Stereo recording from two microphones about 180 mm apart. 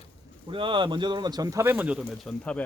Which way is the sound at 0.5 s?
25° right (ahead or behind).